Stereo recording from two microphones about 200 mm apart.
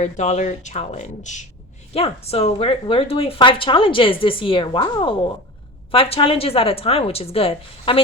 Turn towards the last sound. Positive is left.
turn(degrees=30)  # may be behind; listen again after turning